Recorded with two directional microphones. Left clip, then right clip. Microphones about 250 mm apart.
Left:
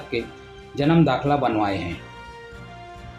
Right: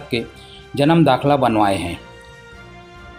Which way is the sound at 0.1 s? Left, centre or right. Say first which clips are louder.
Right 4 dB; right.